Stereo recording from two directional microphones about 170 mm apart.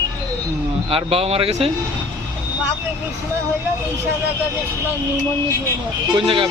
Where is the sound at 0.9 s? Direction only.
35° right (ahead or behind).